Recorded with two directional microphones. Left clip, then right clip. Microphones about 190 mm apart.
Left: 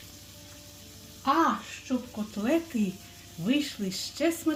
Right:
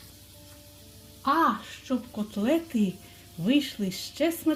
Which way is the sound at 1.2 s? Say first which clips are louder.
Right 1 dB; 30° right (ahead or behind).